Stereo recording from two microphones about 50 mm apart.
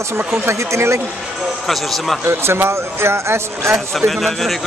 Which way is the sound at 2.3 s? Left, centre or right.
Right.